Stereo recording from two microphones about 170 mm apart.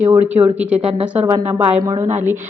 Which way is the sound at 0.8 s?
35° right (ahead or behind).